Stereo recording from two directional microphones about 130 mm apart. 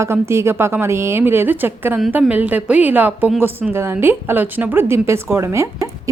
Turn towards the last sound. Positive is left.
turn(degrees=-20)  # may be behind; listen again after turning